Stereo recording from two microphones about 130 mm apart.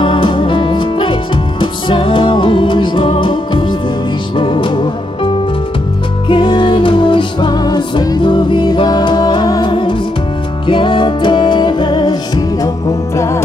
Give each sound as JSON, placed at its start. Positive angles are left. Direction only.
{"t": 0.0, "sound": "music", "side_deg": 40}
{"t": 6.2, "sound": "music", "side_deg": 40}